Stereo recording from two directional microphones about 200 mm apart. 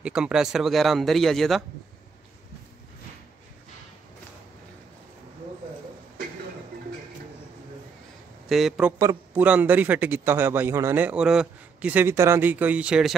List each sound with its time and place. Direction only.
0.0 s speech: 5° right (ahead or behind)
8.5 s a man's voice: centre (ahead or behind)